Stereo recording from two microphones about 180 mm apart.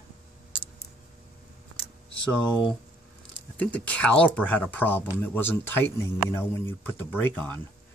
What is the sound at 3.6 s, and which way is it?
Speech, 10° left (ahead or behind).